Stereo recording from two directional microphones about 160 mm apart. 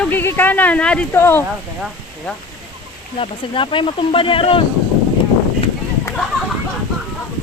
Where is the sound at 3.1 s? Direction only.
30° left (ahead or behind).